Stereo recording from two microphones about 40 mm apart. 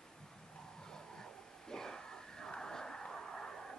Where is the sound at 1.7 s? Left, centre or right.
Centre.